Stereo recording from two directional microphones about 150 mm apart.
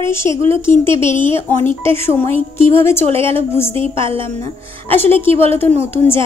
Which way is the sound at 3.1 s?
40° right (ahead or behind).